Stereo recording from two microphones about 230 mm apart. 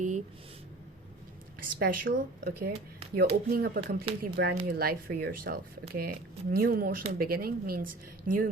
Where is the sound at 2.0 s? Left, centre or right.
Right.